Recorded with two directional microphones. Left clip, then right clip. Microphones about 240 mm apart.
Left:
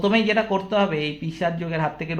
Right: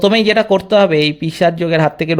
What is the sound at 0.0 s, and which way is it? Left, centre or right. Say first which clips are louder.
Speech: right 8 dB; right.